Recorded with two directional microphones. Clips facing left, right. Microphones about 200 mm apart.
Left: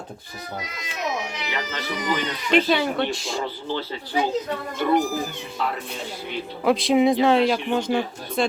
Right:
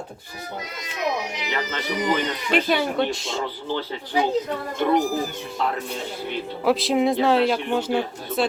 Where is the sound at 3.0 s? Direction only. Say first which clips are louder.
Right 1 dB; 20° right (ahead or behind).